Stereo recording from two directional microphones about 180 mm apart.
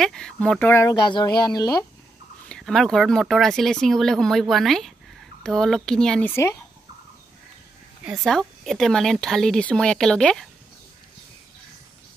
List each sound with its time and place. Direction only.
0.0 s speech: 5° left (ahead or behind)
1.0 s speech: 25° left (ahead or behind)
2.4 s speech: 5° left (ahead or behind)
6.3 s speech: 15° left (ahead or behind)
8.0 s speech: 5° right (ahead or behind)